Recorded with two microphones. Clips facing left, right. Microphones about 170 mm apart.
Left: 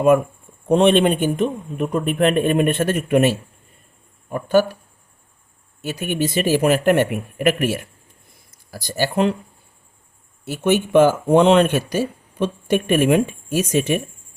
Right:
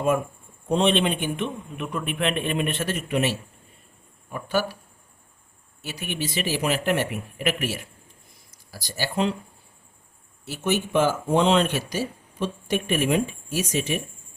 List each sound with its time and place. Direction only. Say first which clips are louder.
0.7 s a man's voice: left 7 dB; 55° left (ahead or behind)
5.8 s a man's voice: left 8 dB; 50° left (ahead or behind)
10.4 s speech: left 7 dB; 55° left (ahead or behind)